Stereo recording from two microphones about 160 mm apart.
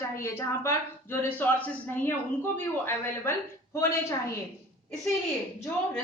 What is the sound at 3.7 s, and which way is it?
Speech, 15° left (ahead or behind).